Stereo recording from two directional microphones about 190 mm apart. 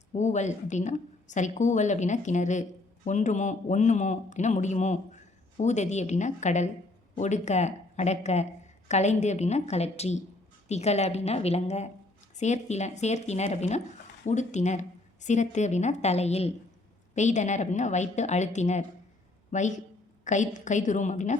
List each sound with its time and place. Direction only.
0.1 s a man's voice: 40° left (ahead or behind)